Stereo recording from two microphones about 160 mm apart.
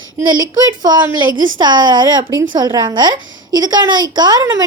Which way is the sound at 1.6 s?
25° right (ahead or behind).